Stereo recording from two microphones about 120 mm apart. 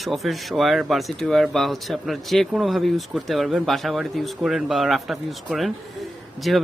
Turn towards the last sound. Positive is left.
turn(degrees=0)  # may be behind; listen again after turning